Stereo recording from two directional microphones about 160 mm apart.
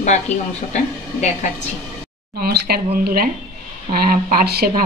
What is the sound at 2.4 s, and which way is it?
A woman's voice, 75° right (ahead or behind).